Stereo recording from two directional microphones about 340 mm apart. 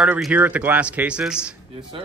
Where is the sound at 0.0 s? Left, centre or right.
Centre.